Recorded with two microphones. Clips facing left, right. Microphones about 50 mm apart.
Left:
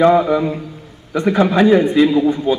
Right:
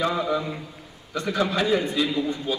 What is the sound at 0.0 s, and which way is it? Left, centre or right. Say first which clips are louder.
A man's voice: left 12 dB; left.